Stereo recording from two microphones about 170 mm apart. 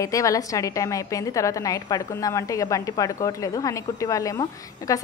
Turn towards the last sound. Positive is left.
turn(degrees=20)  # may be behind; listen again after turning